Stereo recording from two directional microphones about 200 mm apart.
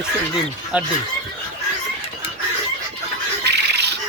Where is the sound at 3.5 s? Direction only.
55° right (ahead or behind).